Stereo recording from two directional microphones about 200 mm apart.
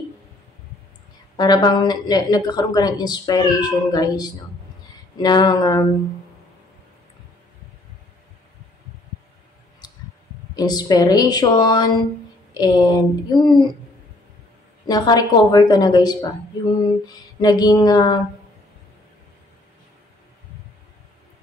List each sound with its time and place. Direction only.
1.3 s a woman's voice: 20° left (ahead or behind)
9.8 s a sound: 20° left (ahead or behind)
10.5 s a woman's voice: 20° left (ahead or behind)
14.9 s a woman's voice: 20° left (ahead or behind)